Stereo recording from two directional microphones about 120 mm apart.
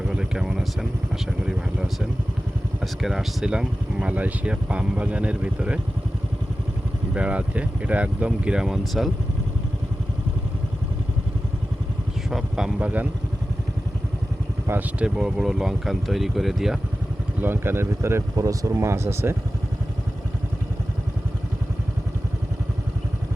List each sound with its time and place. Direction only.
0.1 s vehicle: 5° right (ahead or behind)
1.5 s speech: 5° right (ahead or behind)
7.1 s speech: 10° right (ahead or behind)
12.3 s speech: 5° right (ahead or behind)
14.7 s speech: 10° right (ahead or behind)
17.4 s speech: 20° right (ahead or behind)